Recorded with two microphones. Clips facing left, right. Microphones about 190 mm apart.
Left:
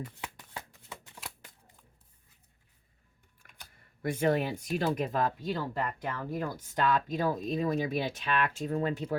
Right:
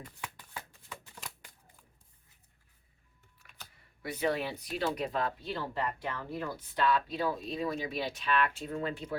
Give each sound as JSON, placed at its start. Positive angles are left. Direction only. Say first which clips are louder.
{"t": 0.2, "sound": "shuffling cards", "louder": "left 2 dB", "side_deg": 25}
{"t": 4.0, "sound": "speech", "louder": "left 4 dB", "side_deg": 50}